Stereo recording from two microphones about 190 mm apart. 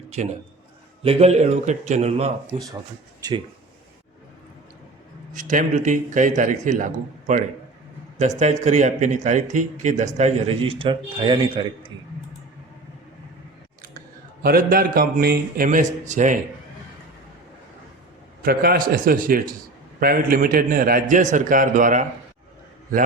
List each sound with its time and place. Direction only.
0.2 s a man's voice: 40° right (ahead or behind)
5.3 s a man's voice: 45° right (ahead or behind); by 11.9 s 25° right (ahead or behind)
14.4 s a man's voice: 50° right (ahead or behind)
18.4 s a man's voice: 50° right (ahead or behind)